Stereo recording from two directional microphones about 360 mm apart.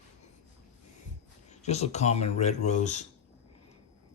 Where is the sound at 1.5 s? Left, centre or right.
Centre.